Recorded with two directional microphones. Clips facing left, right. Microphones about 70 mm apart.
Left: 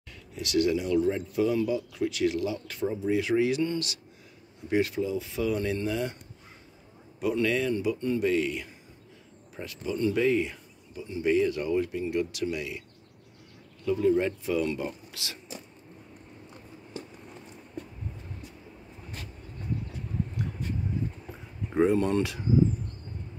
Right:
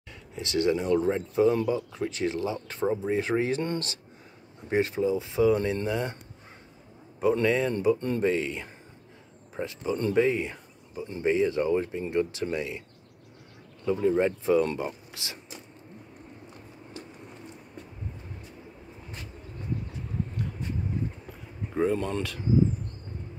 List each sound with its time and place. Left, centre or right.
0.4 s speech: right
7.2 s speech: right
13.8 s speech: right
14.8 s speech: right
21.9 s speech: centre